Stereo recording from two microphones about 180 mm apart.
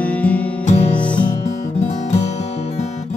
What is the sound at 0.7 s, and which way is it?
Music, 30° left (ahead or behind).